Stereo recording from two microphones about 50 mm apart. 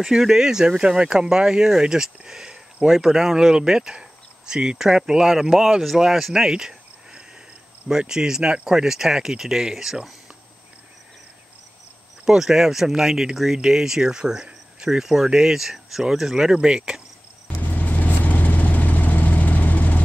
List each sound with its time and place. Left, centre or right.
0.0 s speech: centre
12.3 s speech: centre
16.5 s speech: centre
17.5 s vehicle: left